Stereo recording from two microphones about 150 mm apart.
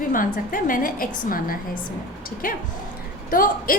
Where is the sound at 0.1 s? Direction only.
65° left (ahead or behind).